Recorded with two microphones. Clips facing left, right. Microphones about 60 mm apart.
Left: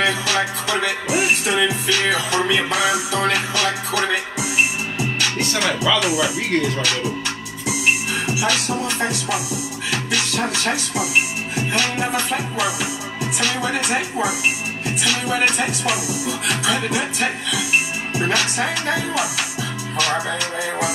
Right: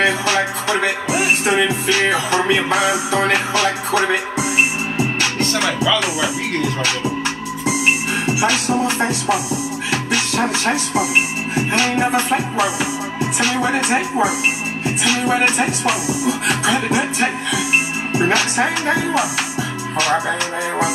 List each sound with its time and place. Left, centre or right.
0.0 s music: right
5.9 s music: right
8.3 s music: right